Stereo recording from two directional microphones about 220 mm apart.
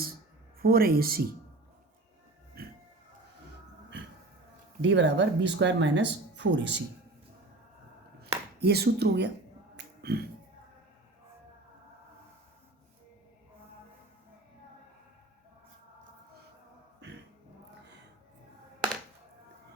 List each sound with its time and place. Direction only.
0.6 s speech: 45° right (ahead or behind)
2.6 s music: 45° right (ahead or behind)
4.8 s speech: 55° right (ahead or behind)
8.6 s speech: 45° right (ahead or behind)
9.7 s finger snapping: 45° right (ahead or behind)